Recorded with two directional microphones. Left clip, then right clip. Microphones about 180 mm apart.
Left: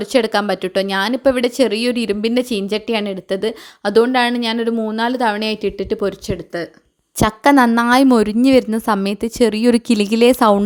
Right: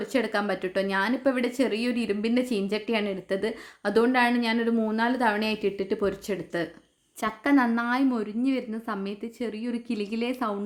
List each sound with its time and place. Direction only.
0.0 s speech: 40° left (ahead or behind)
7.2 s a woman's voice: 55° left (ahead or behind)